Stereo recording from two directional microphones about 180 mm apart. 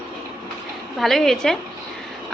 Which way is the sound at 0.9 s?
Centre (ahead or behind).